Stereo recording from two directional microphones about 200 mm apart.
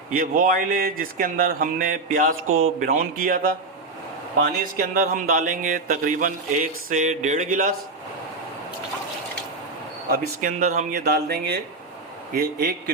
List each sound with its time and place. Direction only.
0.1 s speech: 45° right (ahead or behind)
2.3 s speech: 90° right
2.8 s speech: 45° right (ahead or behind)
4.8 s speech: 45° right (ahead or behind)
10.1 s speech: 40° right (ahead or behind)